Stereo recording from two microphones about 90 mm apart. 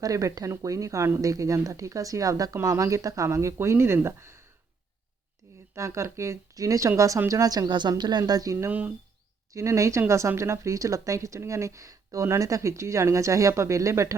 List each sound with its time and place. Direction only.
0.0 s speech: 40° right (ahead or behind)
5.7 s speech: 30° right (ahead or behind); by 8.2 s 55° right (ahead or behind)
8.3 s speech: 45° right (ahead or behind)
8.5 s speech: 20° right (ahead or behind)
9.5 s speech: 35° right (ahead or behind)